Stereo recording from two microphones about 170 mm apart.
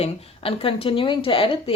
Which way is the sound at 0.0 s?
35° left (ahead or behind).